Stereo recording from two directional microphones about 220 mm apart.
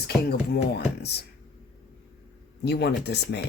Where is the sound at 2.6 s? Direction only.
50° left (ahead or behind).